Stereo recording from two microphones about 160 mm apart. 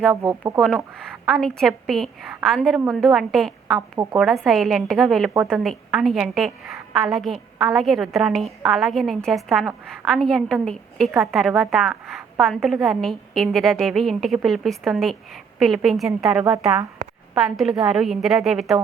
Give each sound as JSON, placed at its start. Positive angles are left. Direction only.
{"t": 0.1, "sound": "speech", "side_deg": -15}
{"t": 0.9, "sound": "a sound", "side_deg": 5}
{"t": 1.3, "sound": "a woman's voice", "side_deg": 5}
{"t": 3.8, "sound": "a woman's voice", "side_deg": -20}
{"t": 4.2, "sound": "a woman's voice", "side_deg": 0}